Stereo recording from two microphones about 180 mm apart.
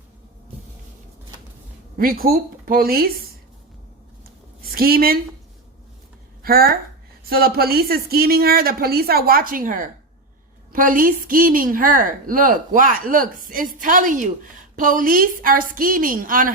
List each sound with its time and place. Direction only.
2.0 s speech: 55° right (ahead or behind)
4.6 s a woman's voice: 55° right (ahead or behind)
6.4 s a woman's voice: 55° right (ahead or behind)